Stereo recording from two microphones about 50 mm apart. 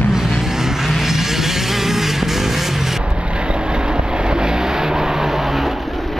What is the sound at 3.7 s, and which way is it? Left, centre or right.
Vehicle, centre.